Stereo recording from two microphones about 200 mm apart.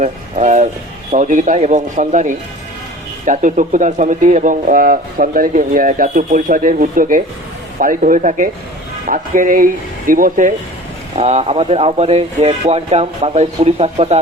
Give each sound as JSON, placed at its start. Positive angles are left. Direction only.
{"t": 0.0, "sound": "speech", "side_deg": -40}
{"t": 11.2, "sound": "speech", "side_deg": -30}